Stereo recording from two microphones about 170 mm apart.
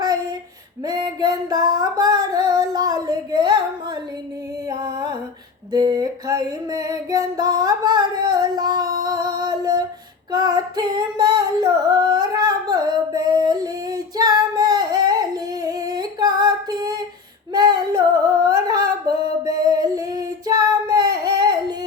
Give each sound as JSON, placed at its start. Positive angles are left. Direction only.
{"t": 0.9, "sound": "female singing", "side_deg": -25}
{"t": 4.7, "sound": "music", "side_deg": -25}
{"t": 5.7, "sound": "female singing", "side_deg": -25}
{"t": 9.0, "sound": "music", "side_deg": -25}
{"t": 10.3, "sound": "female singing", "side_deg": -20}
{"t": 18.4, "sound": "singing", "side_deg": -20}
{"t": 19.6, "sound": "female singing", "side_deg": -20}